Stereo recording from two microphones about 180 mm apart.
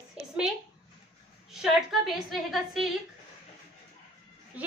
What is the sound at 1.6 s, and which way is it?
A woman's voice, centre (ahead or behind).